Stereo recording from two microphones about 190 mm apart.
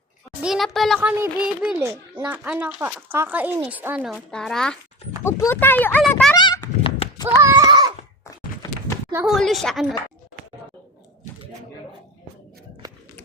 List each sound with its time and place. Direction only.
0.4 s a child's voice: centre (ahead or behind)
1.2 s speech: 15° right (ahead or behind); by 6.3 s 5° left (ahead or behind)
6.3 s a sound: 20° left (ahead or behind)
7.4 s a sound: 20° right (ahead or behind)
8.2 s clip-clop: 15° left (ahead or behind)
9.1 s a child's voice: centre (ahead or behind)